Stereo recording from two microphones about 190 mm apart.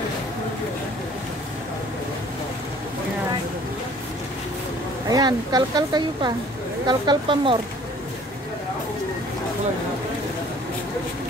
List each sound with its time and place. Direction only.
5.0 s a woman's voice: 20° right (ahead or behind)